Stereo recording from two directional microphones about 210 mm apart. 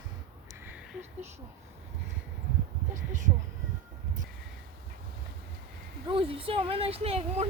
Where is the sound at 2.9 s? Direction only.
35° right (ahead or behind).